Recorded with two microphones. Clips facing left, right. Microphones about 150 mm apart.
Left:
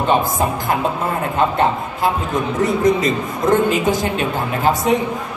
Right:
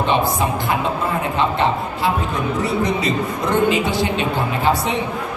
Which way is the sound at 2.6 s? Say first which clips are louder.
Left 6 dB; 45° left (ahead or behind).